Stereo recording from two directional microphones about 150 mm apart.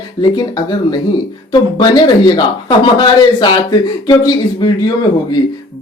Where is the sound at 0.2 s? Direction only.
30° left (ahead or behind).